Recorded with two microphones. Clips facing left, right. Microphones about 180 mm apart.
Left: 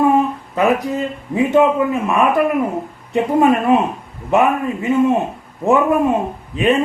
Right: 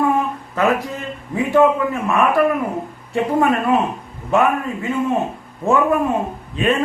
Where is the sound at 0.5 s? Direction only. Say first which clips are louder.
Left 2 dB; 15° left (ahead or behind).